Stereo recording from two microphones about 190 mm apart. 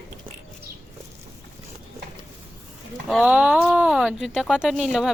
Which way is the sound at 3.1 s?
5° right (ahead or behind).